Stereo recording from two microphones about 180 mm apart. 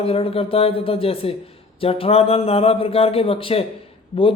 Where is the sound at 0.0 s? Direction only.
30° left (ahead or behind).